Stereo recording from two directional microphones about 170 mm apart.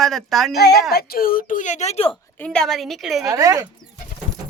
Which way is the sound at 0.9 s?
60° left (ahead or behind).